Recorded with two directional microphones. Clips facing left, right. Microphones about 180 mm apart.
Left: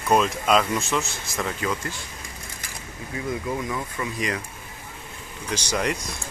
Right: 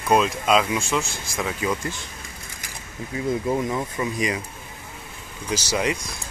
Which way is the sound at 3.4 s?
25° right (ahead or behind).